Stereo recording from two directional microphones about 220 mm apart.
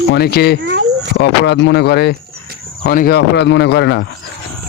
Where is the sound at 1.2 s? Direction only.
50° left (ahead or behind).